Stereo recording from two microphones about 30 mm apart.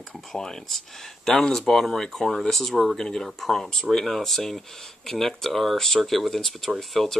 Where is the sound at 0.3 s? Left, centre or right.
Centre.